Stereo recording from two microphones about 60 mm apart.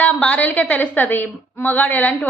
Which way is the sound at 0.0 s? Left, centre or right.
Left.